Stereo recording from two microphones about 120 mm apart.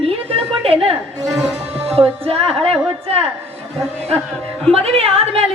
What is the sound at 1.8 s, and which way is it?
Speech, 55° right (ahead or behind).